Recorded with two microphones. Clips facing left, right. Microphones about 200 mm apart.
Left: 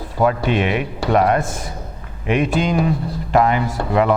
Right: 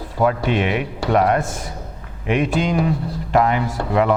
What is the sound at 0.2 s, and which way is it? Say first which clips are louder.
Speech: left 1 dB; 15° left (ahead or behind).